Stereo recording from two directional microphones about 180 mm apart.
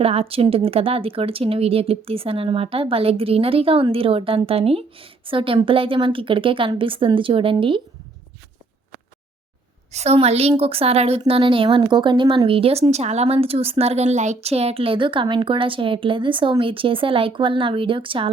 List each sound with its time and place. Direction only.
0.0 s speech: 35° right (ahead or behind)
9.9 s speech: 35° right (ahead or behind)